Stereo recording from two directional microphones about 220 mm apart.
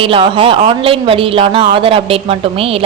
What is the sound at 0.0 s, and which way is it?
A woman's voice, 25° right (ahead or behind).